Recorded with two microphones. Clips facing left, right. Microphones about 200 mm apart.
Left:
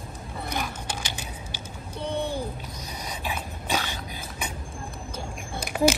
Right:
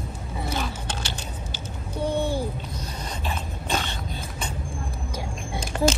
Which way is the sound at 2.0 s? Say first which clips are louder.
Right 4 dB; 10° right (ahead or behind).